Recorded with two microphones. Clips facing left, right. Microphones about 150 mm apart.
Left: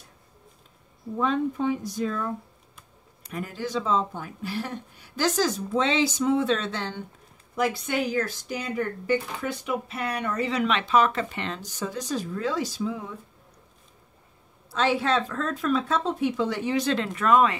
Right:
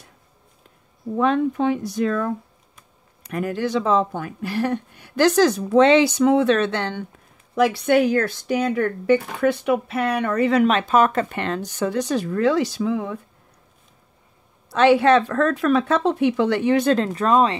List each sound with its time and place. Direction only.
1.1 s speech: 75° right (ahead or behind)
3.3 s speech: 70° right (ahead or behind)
14.7 s speech: 65° right (ahead or behind); by 17.6 s 30° right (ahead or behind)